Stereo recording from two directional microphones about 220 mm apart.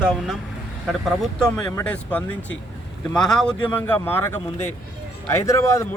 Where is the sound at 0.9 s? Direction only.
Centre (ahead or behind).